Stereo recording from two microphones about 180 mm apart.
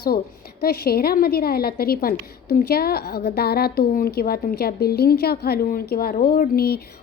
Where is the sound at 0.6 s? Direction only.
60° left (ahead or behind).